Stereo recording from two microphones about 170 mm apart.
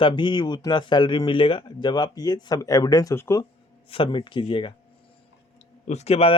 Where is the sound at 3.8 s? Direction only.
30° left (ahead or behind).